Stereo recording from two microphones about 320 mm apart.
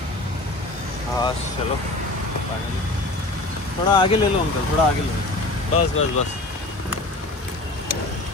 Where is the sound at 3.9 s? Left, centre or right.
Centre.